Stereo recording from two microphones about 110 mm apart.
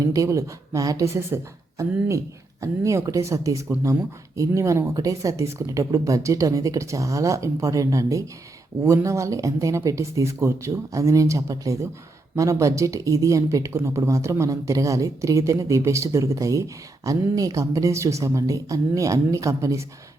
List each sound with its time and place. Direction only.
0.0 s speech: 30° right (ahead or behind)